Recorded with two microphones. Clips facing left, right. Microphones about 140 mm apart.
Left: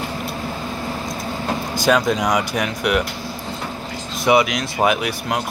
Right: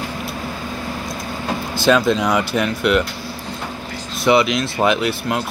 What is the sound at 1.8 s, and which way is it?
Speech, 15° left (ahead or behind).